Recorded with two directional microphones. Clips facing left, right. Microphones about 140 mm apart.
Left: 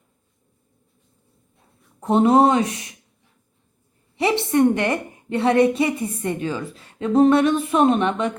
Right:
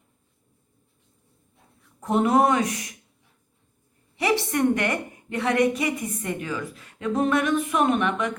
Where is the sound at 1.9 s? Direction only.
25° left (ahead or behind).